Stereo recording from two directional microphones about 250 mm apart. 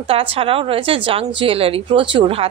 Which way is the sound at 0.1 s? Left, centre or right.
Right.